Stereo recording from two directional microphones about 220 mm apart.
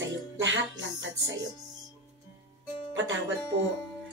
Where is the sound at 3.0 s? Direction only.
55° right (ahead or behind).